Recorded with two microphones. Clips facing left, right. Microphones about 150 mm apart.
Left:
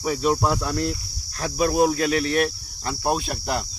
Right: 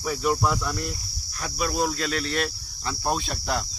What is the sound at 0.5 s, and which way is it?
Speech, 85° left.